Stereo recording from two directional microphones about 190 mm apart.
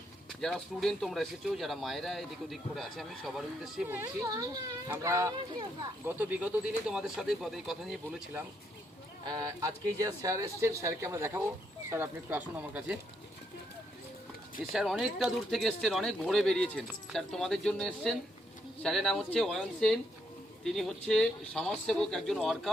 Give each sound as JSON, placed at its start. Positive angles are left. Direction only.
{"t": 0.3, "sound": "speech", "side_deg": 0}
{"t": 9.2, "sound": "speech", "side_deg": -20}
{"t": 14.6, "sound": "speech", "side_deg": 0}